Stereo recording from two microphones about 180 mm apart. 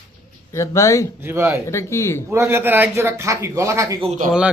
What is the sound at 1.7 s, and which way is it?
Speech, 15° left (ahead or behind).